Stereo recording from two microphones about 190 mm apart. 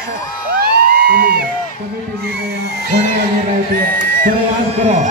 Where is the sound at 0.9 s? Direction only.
50° right (ahead or behind).